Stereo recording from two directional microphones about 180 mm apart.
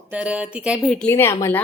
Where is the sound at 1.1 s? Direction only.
15° left (ahead or behind).